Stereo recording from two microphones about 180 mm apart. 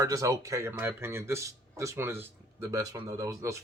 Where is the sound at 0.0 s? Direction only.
15° right (ahead or behind).